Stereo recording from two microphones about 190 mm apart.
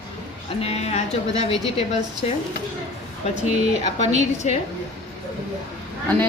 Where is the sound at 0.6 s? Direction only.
35° left (ahead or behind).